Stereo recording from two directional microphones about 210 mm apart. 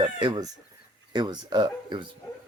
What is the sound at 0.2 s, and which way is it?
Speech, 20° right (ahead or behind).